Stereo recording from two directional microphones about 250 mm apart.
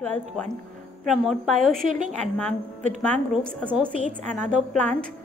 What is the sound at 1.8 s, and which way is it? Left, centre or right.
A woman's voice, right.